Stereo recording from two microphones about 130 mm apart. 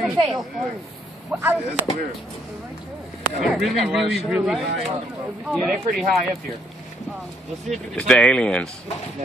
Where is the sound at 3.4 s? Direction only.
Centre (ahead or behind).